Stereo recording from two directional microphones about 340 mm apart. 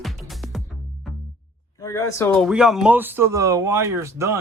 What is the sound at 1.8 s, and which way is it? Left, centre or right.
Speech, centre.